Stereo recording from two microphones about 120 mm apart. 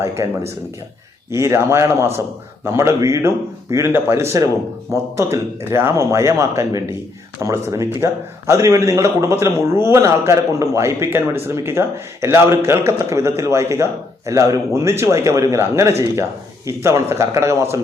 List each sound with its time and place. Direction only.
0.2 s a man's voice: 25° right (ahead or behind)